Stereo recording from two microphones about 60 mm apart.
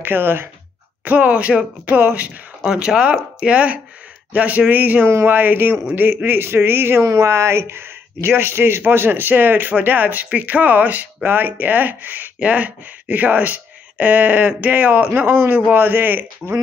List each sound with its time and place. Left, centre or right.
0.0 s speech: right
1.0 s a man's voice: right
2.6 s speech: centre; by 5.0 s right
5.0 s a man's voice: right
7.2 s a man's voice: right
12.4 s a man's voice: right